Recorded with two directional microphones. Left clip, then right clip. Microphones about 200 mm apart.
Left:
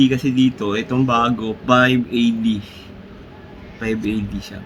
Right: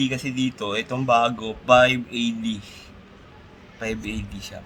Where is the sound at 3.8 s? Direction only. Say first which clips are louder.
Left 7 dB; 25° right (ahead or behind).